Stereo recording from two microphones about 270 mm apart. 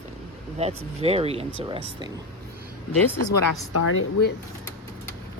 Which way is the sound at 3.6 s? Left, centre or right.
Left.